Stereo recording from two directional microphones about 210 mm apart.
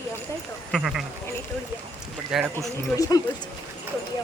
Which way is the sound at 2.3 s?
Centre (ahead or behind).